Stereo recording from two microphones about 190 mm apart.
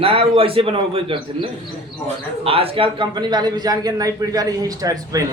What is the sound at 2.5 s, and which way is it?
A man's voice, 30° right (ahead or behind).